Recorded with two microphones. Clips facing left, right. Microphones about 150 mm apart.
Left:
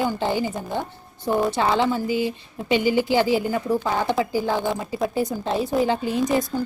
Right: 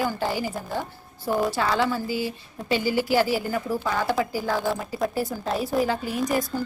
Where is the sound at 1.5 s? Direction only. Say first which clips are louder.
Left 3 dB; 25° left (ahead or behind).